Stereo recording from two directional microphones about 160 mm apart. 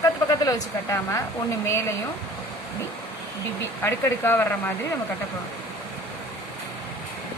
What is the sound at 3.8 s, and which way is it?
Speech, 15° left (ahead or behind).